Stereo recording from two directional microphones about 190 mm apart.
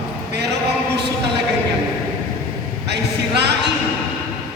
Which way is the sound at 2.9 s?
65° right (ahead or behind).